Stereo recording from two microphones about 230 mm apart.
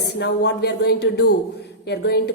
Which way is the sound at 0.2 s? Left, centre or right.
Left.